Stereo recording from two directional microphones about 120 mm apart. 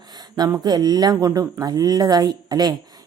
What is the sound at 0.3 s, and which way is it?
A woman's voice, 35° right (ahead or behind).